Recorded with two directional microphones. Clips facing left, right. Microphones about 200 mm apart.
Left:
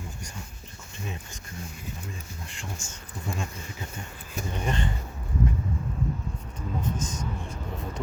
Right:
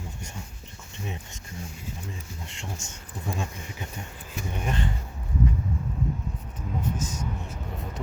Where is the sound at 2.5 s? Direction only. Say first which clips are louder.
Right 1 dB; 20° right (ahead or behind).